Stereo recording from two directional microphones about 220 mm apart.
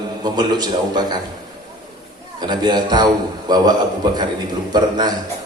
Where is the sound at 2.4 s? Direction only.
20° right (ahead or behind).